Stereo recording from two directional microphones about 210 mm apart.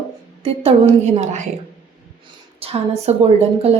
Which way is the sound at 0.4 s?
30° right (ahead or behind).